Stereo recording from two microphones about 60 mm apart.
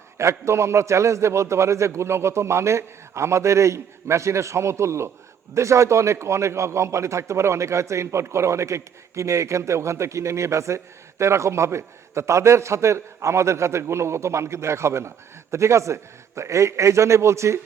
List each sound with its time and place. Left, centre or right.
0.2 s a man's voice: right